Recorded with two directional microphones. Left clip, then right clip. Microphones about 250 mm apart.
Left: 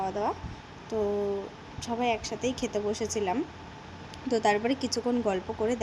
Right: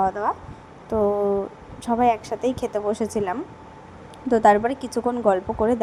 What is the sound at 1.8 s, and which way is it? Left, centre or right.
Speech, right.